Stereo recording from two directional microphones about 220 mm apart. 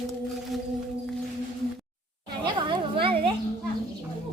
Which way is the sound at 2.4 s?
20° right (ahead or behind).